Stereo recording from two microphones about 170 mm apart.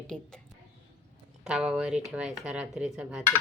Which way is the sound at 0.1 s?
5° left (ahead or behind).